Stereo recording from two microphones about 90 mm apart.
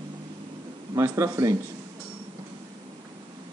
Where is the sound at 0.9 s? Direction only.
35° right (ahead or behind).